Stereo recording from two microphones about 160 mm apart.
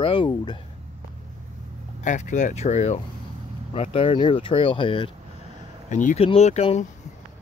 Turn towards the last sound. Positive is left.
turn(degrees=40)  # may be behind; listen again after turning